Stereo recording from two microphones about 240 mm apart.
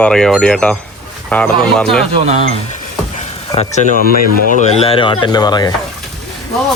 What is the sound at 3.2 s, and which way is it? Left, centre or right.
Speech, left.